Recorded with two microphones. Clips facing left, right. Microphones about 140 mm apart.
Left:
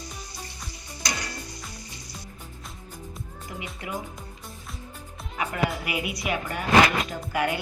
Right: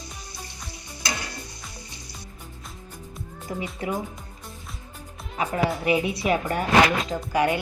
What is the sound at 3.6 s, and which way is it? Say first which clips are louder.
Speech: right 8 dB; 35° right (ahead or behind).